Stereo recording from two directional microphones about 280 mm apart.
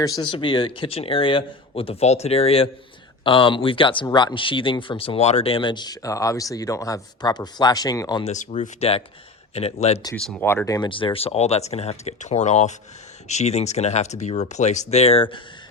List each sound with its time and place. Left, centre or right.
0.0 s speech: centre
10.2 s speech: centre